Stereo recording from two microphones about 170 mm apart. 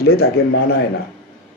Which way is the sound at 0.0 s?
65° left (ahead or behind).